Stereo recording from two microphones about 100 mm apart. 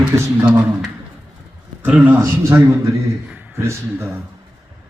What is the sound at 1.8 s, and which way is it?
A man's voice, 15° right (ahead or behind).